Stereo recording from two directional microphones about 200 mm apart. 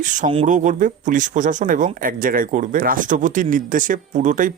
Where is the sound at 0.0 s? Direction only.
40° right (ahead or behind).